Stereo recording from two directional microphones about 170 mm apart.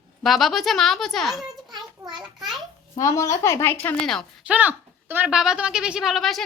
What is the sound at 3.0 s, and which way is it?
A woman's voice, 20° left (ahead or behind).